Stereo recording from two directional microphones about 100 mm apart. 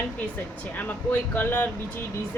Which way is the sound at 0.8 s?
20° left (ahead or behind).